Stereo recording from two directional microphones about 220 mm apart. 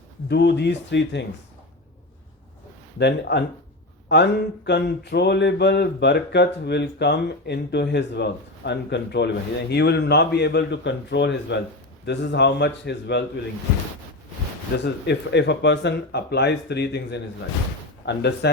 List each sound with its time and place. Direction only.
0.3 s speech: 50° left (ahead or behind)
3.0 s speech: 50° left (ahead or behind)
14.8 s speech: 50° left (ahead or behind)